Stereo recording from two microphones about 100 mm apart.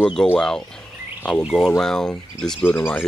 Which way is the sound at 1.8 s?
5° left (ahead or behind).